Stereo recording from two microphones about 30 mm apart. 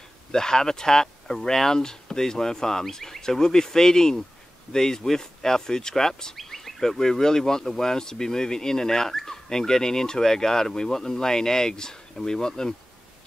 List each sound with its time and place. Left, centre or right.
0.3 s speech: centre
6.3 s speech: centre